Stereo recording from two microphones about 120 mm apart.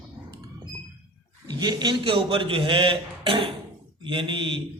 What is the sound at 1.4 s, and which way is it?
A man's voice, 35° right (ahead or behind).